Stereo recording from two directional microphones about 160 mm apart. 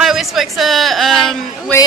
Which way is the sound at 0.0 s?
Centre (ahead or behind).